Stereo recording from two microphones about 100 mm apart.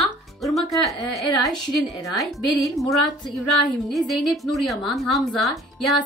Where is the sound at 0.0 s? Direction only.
Centre (ahead or behind).